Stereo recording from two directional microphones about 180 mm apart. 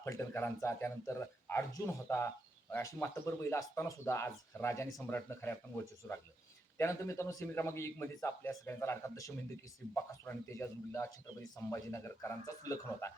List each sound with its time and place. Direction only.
0.0 s speech: 15° left (ahead or behind)